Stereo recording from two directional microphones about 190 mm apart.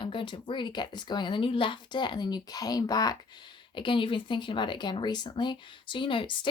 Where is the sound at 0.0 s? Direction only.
25° left (ahead or behind).